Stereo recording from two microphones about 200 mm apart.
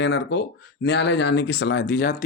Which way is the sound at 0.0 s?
60° left (ahead or behind).